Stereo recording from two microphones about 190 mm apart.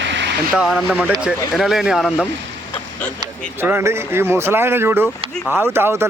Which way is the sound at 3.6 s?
10° right (ahead or behind).